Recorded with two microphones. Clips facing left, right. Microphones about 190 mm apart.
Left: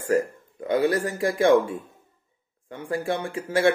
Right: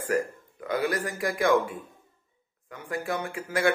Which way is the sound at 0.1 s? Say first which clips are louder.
Left 5 dB; 25° left (ahead or behind).